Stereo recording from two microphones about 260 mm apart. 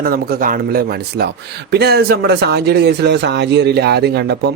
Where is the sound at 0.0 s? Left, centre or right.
Right.